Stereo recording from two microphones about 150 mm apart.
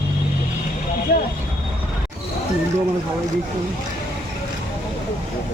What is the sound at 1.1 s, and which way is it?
Speech, 90° left.